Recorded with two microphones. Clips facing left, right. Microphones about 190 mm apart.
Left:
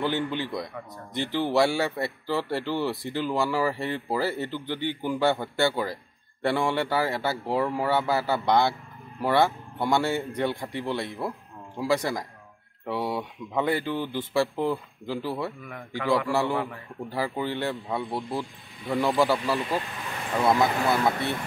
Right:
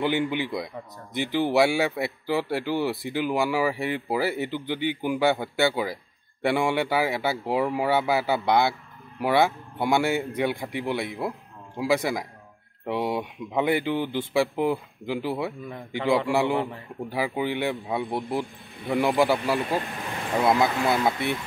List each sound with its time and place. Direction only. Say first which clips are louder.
0.0 s speech: right 2 dB; 15° right (ahead or behind)